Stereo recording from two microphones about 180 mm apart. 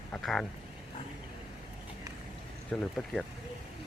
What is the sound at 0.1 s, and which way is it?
Speech, centre (ahead or behind).